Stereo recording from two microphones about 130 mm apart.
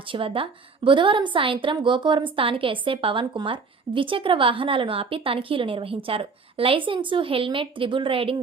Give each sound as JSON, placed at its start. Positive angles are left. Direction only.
{"t": 0.1, "sound": "a woman's voice", "side_deg": -45}